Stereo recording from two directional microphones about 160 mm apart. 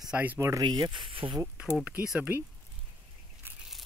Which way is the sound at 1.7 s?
10° right (ahead or behind).